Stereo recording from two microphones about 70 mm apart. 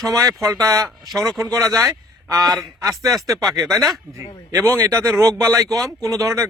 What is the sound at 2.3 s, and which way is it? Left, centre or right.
Speech, right.